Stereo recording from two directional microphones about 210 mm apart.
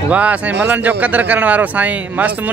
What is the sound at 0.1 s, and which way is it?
Speech, 5° right (ahead or behind).